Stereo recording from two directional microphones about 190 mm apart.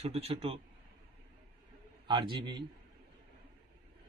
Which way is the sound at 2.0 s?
25° right (ahead or behind).